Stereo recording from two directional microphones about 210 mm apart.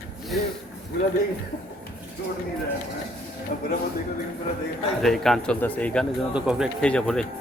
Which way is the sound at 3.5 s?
40° left (ahead or behind).